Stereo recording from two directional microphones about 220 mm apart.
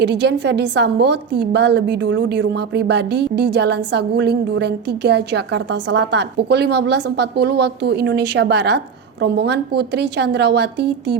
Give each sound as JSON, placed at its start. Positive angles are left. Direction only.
{"t": 0.0, "sound": "a woman's voice", "side_deg": -50}